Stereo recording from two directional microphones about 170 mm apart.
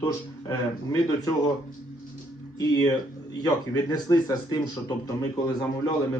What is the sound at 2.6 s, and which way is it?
Speech, 25° left (ahead or behind).